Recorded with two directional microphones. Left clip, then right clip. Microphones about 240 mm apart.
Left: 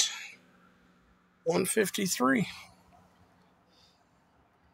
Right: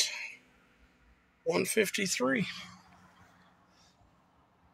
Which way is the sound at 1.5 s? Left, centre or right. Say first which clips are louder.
Left 1 dB; centre.